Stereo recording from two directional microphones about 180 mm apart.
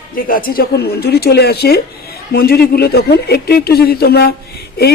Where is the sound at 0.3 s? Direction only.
50° left (ahead or behind).